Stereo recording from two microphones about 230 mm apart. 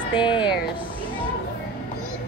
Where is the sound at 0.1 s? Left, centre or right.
Left.